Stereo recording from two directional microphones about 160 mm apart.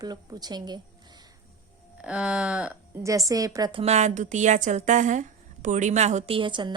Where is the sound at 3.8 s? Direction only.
45° right (ahead or behind).